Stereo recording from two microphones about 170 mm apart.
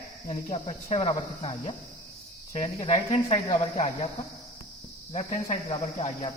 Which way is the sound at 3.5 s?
35° left (ahead or behind).